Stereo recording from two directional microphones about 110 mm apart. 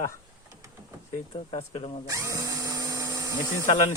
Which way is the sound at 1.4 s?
65° left (ahead or behind).